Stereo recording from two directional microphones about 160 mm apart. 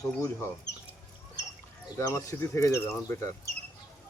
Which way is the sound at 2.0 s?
20° left (ahead or behind).